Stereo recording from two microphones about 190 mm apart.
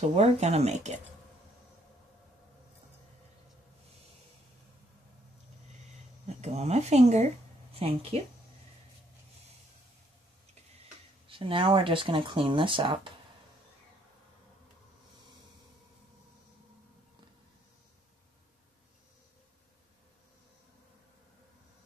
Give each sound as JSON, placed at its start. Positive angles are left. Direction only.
{"t": 0.1, "sound": "speech", "side_deg": -35}
{"t": 6.2, "sound": "speech", "side_deg": -35}
{"t": 11.2, "sound": "speech", "side_deg": -30}